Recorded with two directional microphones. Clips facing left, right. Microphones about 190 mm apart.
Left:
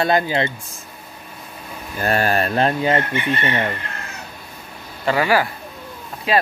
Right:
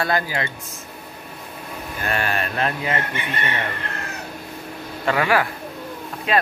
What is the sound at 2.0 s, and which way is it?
Speech, 40° left (ahead or behind).